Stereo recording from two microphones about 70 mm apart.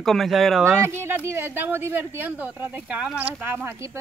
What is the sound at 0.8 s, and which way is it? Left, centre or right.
Speech, right.